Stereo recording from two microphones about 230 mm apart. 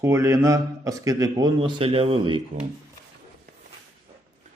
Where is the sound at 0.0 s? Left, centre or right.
Centre.